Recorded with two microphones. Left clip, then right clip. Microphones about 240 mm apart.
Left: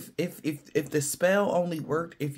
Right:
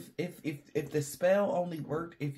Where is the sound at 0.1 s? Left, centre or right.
Left.